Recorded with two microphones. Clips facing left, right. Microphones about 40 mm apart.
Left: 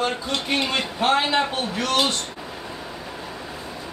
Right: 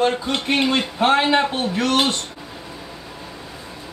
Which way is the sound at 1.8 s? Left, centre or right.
Right.